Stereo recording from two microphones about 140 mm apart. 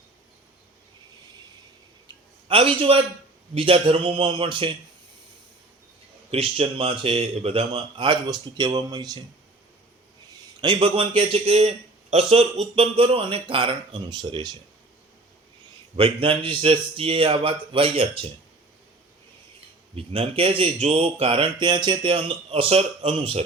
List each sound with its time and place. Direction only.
2.5 s speech: 40° right (ahead or behind)
6.3 s speech: 45° right (ahead or behind); by 9.2 s 30° right (ahead or behind)
10.6 s speech: 40° right (ahead or behind)
16.0 s speech: 40° right (ahead or behind)
20.0 s speech: 40° right (ahead or behind)